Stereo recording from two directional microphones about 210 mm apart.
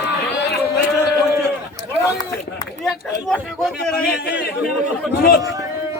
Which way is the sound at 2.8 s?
Centre (ahead or behind).